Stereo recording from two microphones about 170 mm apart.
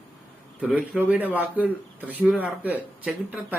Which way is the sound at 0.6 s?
5° right (ahead or behind).